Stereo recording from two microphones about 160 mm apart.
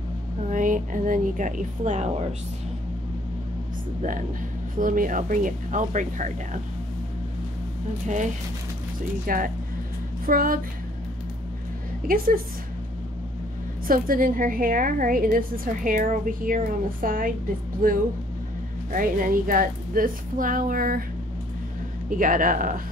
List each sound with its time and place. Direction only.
0.5 s a woman's voice: 55° right (ahead or behind)
4.7 s a woman's voice: 55° right (ahead or behind)
9.2 s a woman's voice: 60° right (ahead or behind)
12.1 s a woman's voice: 65° right (ahead or behind)
13.8 s a woman's voice: 60° right (ahead or behind)
22.1 s a woman's voice: 60° right (ahead or behind)